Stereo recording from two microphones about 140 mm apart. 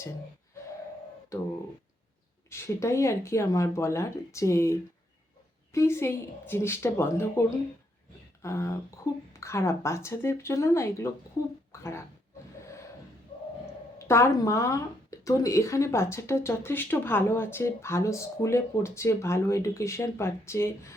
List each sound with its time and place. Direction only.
1.3 s speech: 20° left (ahead or behind)
2.5 s a woman's voice: 20° left (ahead or behind)
14.1 s speech: 20° left (ahead or behind)